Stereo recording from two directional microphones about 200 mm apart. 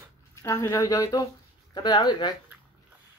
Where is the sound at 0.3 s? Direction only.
15° left (ahead or behind).